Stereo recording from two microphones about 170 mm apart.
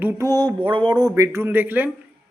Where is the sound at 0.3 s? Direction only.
25° right (ahead or behind).